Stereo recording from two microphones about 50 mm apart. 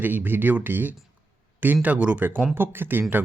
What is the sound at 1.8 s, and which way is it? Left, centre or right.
Speech, right.